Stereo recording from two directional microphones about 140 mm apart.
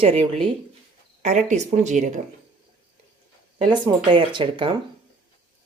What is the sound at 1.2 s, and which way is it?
Speech, 55° right (ahead or behind).